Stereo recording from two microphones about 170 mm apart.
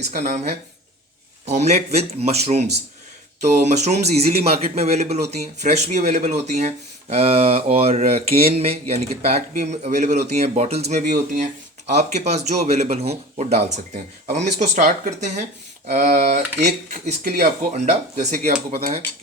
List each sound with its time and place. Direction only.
0.1 s speech: 40° right (ahead or behind)
1.5 s speech: 40° right (ahead or behind)
17.7 s speech: 40° right (ahead or behind)